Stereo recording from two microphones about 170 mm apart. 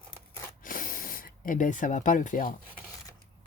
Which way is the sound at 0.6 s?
55° left (ahead or behind).